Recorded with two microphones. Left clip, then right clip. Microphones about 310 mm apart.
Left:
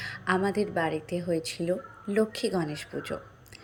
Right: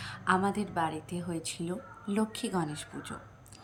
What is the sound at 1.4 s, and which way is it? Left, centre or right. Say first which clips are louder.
Speech: left 8 dB; centre.